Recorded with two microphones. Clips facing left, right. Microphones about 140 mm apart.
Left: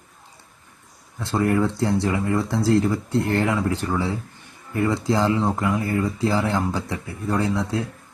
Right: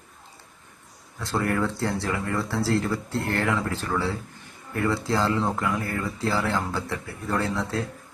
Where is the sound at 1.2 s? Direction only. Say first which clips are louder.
Left 5 dB; 20° left (ahead or behind).